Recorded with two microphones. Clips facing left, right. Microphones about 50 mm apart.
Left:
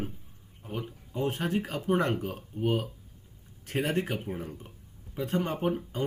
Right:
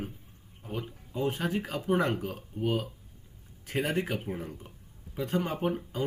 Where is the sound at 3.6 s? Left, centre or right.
Centre.